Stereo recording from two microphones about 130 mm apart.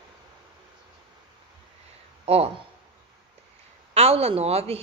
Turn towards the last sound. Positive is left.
turn(degrees=-50)  # may be behind; listen again after turning